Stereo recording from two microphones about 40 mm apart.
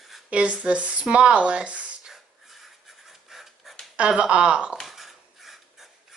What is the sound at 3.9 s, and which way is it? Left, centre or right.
Speech, right.